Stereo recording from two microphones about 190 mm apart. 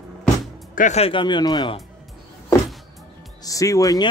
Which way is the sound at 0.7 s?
40° left (ahead or behind).